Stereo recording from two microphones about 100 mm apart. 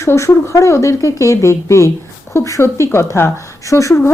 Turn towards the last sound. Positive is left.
turn(degrees=30)  # may be behind; listen again after turning